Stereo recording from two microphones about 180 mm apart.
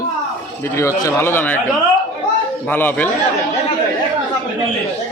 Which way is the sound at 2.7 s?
10° left (ahead or behind).